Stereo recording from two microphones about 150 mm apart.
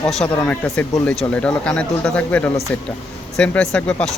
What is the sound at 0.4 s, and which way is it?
Speech, 10° left (ahead or behind).